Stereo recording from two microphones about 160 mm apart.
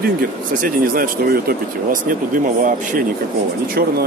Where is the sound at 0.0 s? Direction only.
65° right (ahead or behind).